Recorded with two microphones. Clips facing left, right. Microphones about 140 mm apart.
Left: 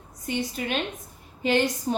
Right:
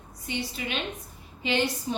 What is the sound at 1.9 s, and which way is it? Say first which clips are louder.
Speech: left 4 dB; 50° left (ahead or behind).